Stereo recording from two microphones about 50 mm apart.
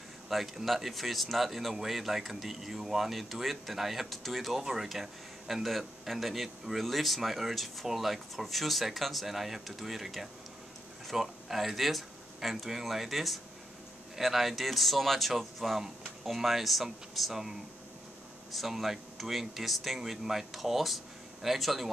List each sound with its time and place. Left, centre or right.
0.3 s speech: centre